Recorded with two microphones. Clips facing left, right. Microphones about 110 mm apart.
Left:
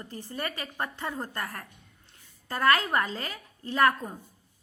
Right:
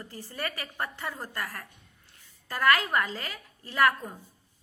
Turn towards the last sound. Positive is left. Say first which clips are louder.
# left 1 dB
turn(degrees=20)  # may be behind; listen again after turning